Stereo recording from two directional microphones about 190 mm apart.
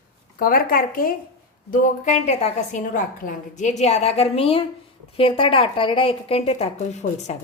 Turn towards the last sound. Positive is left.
turn(degrees=35)  # may be behind; listen again after turning